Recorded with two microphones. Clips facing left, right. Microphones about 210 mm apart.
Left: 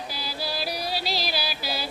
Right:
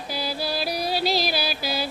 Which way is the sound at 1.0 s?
50° right (ahead or behind).